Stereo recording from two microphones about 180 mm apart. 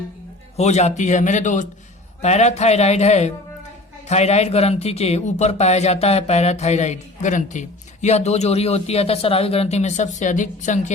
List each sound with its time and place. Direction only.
0.5 s speech: 40° left (ahead or behind)